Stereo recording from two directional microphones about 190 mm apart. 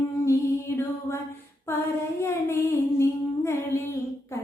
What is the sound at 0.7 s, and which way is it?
Mantra, 15° left (ahead or behind).